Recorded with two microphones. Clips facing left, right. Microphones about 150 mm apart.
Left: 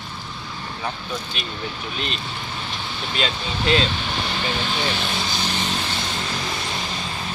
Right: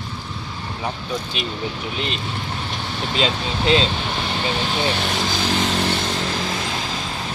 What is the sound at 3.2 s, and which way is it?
Speech, 25° right (ahead or behind).